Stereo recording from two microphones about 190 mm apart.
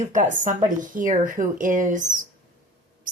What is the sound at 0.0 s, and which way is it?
Speech, 40° right (ahead or behind).